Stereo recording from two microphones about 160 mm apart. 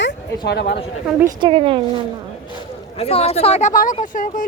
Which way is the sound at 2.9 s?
40° left (ahead or behind).